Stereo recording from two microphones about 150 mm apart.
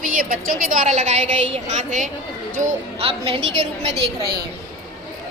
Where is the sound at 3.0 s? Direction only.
35° right (ahead or behind).